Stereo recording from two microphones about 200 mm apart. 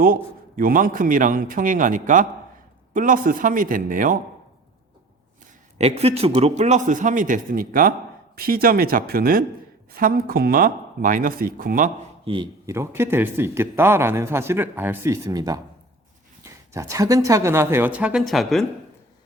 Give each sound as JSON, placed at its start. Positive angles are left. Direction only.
{"t": 0.0, "sound": "a man's voice", "side_deg": -45}
{"t": 5.7, "sound": "a man's voice", "side_deg": -30}
{"t": 12.2, "sound": "speech", "side_deg": -25}
{"t": 12.6, "sound": "speech", "side_deg": -15}